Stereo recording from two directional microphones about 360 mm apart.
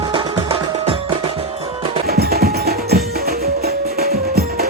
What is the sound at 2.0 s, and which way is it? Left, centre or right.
Music, right.